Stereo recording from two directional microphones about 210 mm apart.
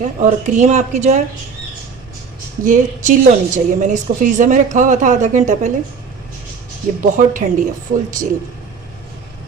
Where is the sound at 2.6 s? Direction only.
40° right (ahead or behind).